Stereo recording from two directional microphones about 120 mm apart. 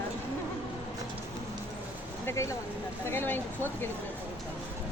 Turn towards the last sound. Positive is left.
turn(degrees=15)  # may be behind; listen again after turning